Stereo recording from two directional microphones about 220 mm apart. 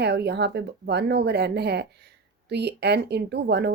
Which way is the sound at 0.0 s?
50° right (ahead or behind).